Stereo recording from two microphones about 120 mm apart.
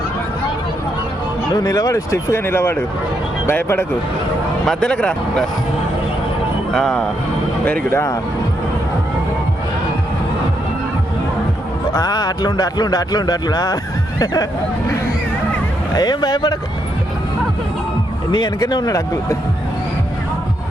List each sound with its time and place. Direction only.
1.5 s speech: 30° left (ahead or behind)
4.6 s speech: 5° left (ahead or behind)
6.7 s speech: 5° left (ahead or behind)
7.6 s speech: 15° left (ahead or behind)
11.9 s speech: 35° left (ahead or behind)
16.0 s speech: 35° left (ahead or behind)
18.3 s speech: 40° left (ahead or behind)